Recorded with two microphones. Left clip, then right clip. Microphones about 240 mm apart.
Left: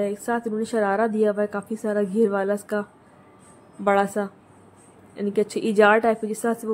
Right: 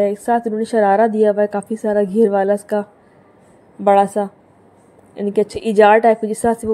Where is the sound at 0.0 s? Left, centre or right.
Centre.